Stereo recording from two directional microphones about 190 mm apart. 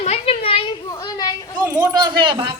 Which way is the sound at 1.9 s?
25° right (ahead or behind).